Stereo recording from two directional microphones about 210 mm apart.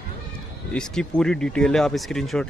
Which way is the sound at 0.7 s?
5° left (ahead or behind).